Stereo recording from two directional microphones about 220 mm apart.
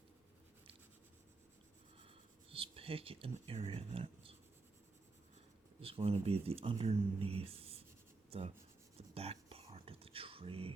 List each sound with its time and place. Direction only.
2.5 s speech: 25° right (ahead or behind)
5.8 s speech: 25° right (ahead or behind)
9.0 s whispering: 25° right (ahead or behind)